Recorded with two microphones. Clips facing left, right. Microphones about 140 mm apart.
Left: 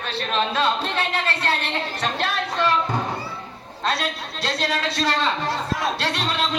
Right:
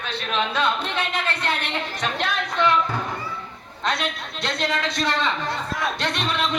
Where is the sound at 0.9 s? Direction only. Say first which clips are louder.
Left 1 dB; 35° left (ahead or behind).